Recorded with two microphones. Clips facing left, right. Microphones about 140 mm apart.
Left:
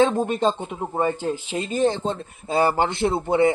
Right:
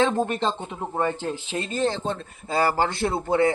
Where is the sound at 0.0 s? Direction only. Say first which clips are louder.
Left 3 dB; 15° left (ahead or behind).